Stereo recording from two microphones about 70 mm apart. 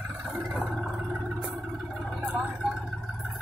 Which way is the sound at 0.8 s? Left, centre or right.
Centre.